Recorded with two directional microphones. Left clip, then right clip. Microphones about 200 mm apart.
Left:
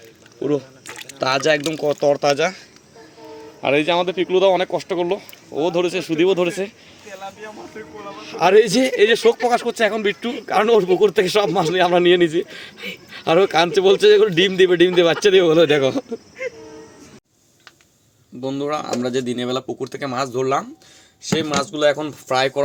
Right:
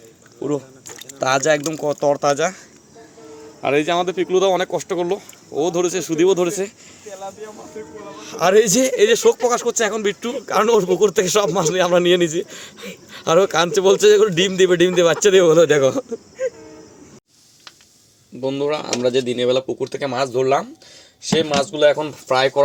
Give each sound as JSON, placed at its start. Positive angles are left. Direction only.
{"t": 1.2, "sound": "speech", "side_deg": 0}
{"t": 3.6, "sound": "speech", "side_deg": 5}
{"t": 7.8, "sound": "speech", "side_deg": -50}
{"t": 8.1, "sound": "speech", "side_deg": 0}
{"t": 18.4, "sound": "speech", "side_deg": 5}